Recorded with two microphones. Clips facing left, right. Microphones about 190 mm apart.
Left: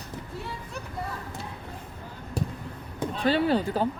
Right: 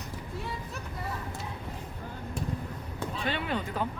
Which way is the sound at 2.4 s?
35° left (ahead or behind).